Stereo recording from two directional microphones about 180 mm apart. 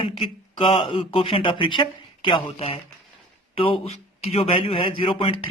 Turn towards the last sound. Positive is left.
turn(degrees=30)  # may be behind; listen again after turning